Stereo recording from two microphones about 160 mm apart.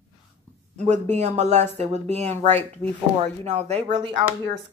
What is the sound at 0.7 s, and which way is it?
Speech, 50° right (ahead or behind).